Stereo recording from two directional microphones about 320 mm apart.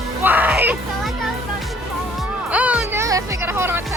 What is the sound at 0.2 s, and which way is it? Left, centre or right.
Music, centre.